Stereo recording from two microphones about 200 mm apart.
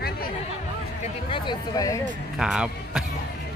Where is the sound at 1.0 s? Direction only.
25° left (ahead or behind).